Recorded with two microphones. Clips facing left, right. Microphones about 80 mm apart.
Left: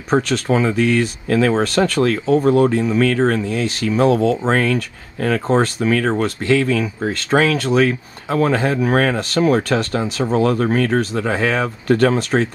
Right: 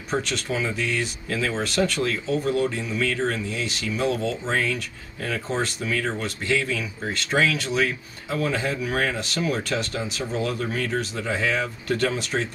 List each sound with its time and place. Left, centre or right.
0.1 s speech: left